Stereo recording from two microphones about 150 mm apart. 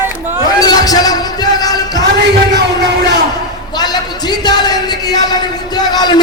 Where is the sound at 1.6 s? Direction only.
25° left (ahead or behind).